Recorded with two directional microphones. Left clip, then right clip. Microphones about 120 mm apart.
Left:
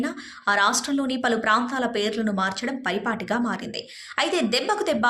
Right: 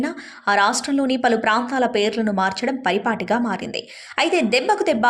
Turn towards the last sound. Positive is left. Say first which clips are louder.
# right 5 dB
turn(degrees=-25)  # may be behind; listen again after turning